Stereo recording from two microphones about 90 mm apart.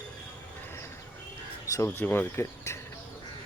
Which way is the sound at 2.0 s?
25° left (ahead or behind).